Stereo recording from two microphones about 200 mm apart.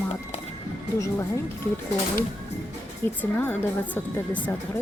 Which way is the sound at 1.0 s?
15° left (ahead or behind).